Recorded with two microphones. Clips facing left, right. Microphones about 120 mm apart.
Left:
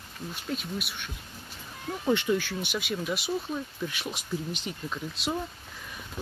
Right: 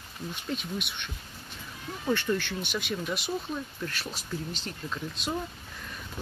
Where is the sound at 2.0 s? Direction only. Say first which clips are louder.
Left 2 dB; 15° left (ahead or behind).